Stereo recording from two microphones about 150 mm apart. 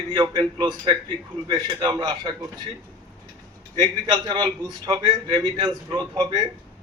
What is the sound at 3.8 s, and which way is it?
A man's voice, 25° right (ahead or behind).